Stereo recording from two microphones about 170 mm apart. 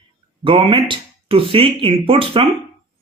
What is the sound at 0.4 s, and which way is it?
A man's voice, 30° right (ahead or behind).